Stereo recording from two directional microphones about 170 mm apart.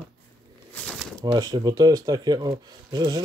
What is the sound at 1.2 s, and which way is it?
Speech, 25° right (ahead or behind).